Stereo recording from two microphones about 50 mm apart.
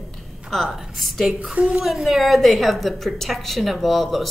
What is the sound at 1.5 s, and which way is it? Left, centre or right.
Speech, right.